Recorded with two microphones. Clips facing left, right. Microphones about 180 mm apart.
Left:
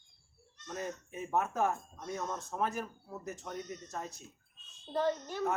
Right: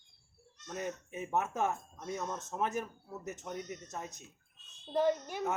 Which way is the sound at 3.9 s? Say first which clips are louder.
Left 1 dB; 20° right (ahead or behind).